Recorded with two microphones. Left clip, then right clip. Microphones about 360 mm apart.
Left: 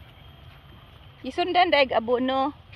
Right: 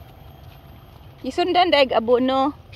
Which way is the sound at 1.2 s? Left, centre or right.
Centre.